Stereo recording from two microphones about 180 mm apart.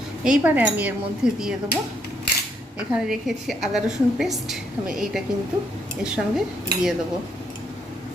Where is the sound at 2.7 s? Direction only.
5° right (ahead or behind).